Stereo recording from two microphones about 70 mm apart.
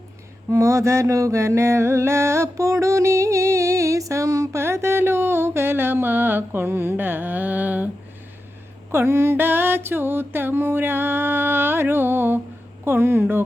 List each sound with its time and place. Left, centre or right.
0.5 s mantra: right
8.9 s mantra: right